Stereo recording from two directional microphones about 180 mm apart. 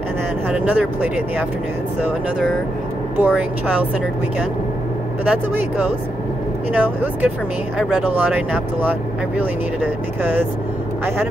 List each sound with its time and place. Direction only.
0.5 s speech: 10° right (ahead or behind)
3.2 s speech: 10° right (ahead or behind)
5.5 s speech: 10° right (ahead or behind)